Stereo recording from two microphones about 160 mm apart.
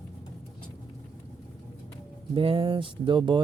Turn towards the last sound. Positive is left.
turn(degrees=-30)  # may be behind; listen again after turning